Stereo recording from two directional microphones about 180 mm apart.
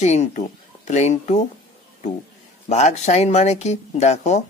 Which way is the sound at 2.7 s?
40° left (ahead or behind).